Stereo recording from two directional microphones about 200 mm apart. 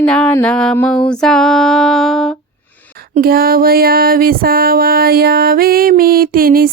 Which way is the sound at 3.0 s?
50° right (ahead or behind).